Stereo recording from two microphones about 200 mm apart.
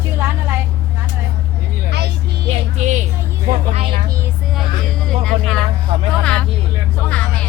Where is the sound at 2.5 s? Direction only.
35° right (ahead or behind).